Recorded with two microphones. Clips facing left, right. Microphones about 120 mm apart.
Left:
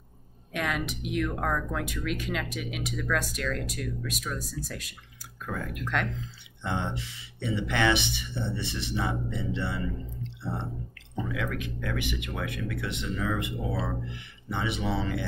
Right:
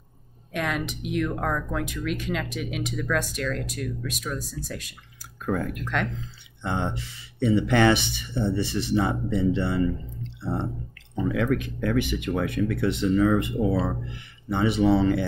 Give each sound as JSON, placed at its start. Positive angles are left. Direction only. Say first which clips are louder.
{"t": 0.5, "sound": "speech", "louder": "right 2 dB", "side_deg": 0}
{"t": 5.4, "sound": "speech", "louder": "right 7 dB", "side_deg": -45}
{"t": 11.3, "sound": "speech", "louder": "right 10 dB", "side_deg": -40}